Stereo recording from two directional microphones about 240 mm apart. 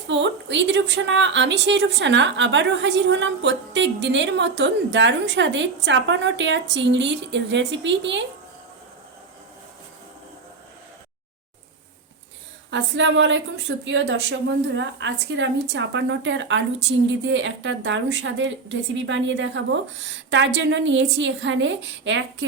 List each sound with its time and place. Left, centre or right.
0.1 s a woman's voice: right
12.7 s a woman's voice: right